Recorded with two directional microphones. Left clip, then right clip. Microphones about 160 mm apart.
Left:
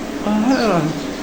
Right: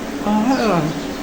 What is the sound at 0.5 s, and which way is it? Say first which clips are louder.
Speech: left 2 dB; 5° left (ahead or behind).